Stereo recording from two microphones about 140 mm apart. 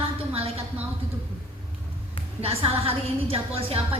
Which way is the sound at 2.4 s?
45° right (ahead or behind).